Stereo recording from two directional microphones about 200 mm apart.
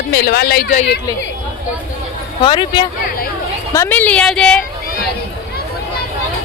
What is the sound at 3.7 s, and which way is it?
Speech, 10° left (ahead or behind).